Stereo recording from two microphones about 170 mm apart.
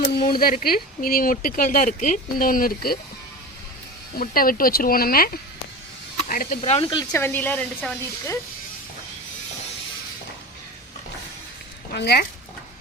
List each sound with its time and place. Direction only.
0.3 s speech: 60° left (ahead or behind)
4.2 s speech: 55° left (ahead or behind)
6.6 s speech: 35° left (ahead or behind)
7.1 s speech: 15° left (ahead or behind)
11.9 s speech: 70° left (ahead or behind)